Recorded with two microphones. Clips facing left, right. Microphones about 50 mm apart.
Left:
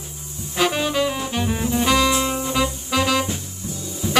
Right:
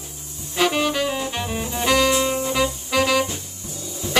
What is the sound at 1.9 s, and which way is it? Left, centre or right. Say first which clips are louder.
Music: even; centre.